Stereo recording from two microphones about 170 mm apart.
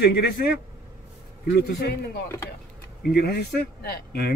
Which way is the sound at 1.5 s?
70° left (ahead or behind).